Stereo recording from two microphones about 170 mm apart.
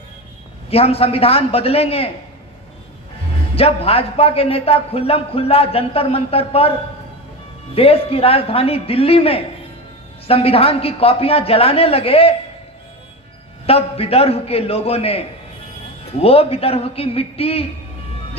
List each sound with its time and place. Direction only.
0.7 s a man's voice: 35° left (ahead or behind)
3.5 s a man's voice: 35° left (ahead or behind)
7.8 s a man's voice: 35° left (ahead or behind)
13.7 s a man's voice: 35° left (ahead or behind)